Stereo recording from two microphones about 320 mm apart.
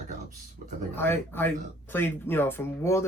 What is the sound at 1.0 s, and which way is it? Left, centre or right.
Speech, centre.